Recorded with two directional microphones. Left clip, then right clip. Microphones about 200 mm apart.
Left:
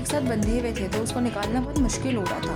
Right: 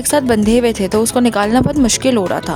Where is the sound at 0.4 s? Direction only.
50° right (ahead or behind).